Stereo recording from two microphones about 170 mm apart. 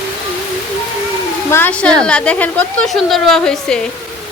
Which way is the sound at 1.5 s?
10° left (ahead or behind).